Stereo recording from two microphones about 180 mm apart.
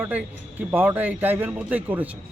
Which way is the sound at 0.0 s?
10° right (ahead or behind).